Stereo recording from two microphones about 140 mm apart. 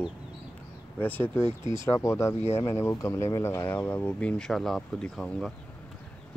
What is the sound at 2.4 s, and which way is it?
Speech, 50° left (ahead or behind).